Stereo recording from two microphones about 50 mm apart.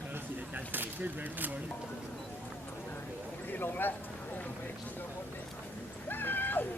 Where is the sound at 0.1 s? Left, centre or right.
Right.